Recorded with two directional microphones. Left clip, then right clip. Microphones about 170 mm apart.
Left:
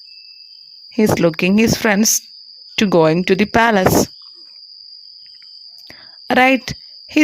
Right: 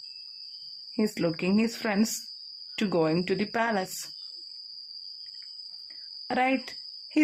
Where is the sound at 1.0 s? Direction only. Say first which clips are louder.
Left 14 dB; 55° left (ahead or behind).